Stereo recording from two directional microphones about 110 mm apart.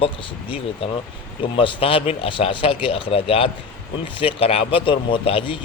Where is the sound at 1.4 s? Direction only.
50° left (ahead or behind).